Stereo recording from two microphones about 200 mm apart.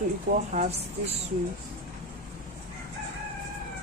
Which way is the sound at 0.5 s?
35° right (ahead or behind).